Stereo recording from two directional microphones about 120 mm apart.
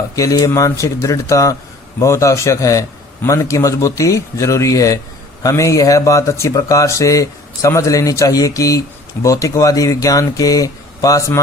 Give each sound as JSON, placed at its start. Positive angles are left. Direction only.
{"t": 0.2, "sound": "speech", "side_deg": 30}